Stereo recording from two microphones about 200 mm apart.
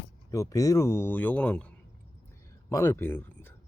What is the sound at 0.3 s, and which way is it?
Speech, 15° left (ahead or behind).